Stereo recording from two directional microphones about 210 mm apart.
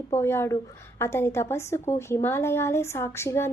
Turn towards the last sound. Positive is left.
turn(degrees=10)  # may be behind; listen again after turning